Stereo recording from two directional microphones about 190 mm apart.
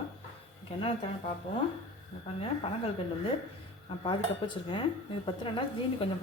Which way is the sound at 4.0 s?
25° left (ahead or behind).